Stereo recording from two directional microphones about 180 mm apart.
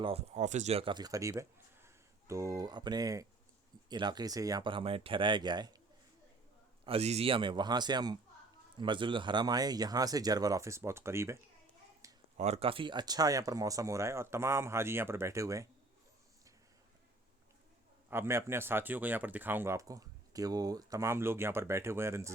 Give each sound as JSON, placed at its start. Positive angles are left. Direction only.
{"t": 0.0, "sound": "speech", "side_deg": -35}
{"t": 6.8, "sound": "speech", "side_deg": -35}
{"t": 12.0, "sound": "a sound", "side_deg": -20}
{"t": 12.4, "sound": "speech", "side_deg": -35}
{"t": 18.1, "sound": "speech", "side_deg": -15}